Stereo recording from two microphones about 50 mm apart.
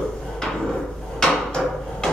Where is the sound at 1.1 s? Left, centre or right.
Centre.